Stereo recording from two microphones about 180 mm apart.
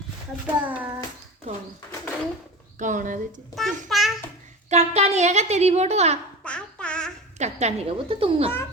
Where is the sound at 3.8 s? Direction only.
Centre (ahead or behind).